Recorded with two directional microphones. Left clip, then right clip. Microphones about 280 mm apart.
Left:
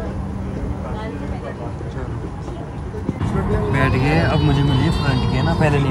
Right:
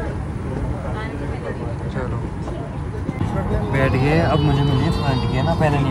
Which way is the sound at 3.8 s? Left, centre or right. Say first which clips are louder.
Right 1 dB; right.